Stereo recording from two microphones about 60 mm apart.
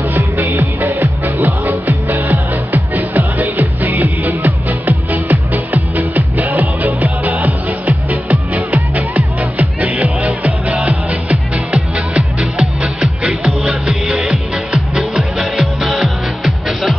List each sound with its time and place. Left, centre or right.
0.1 s music: right; by 16.9 s centre